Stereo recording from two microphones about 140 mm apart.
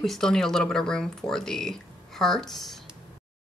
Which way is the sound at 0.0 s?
5° left (ahead or behind).